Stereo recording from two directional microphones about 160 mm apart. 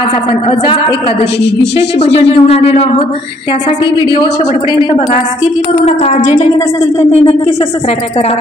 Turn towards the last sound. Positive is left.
turn(degrees=40)  # may be behind; listen again after turning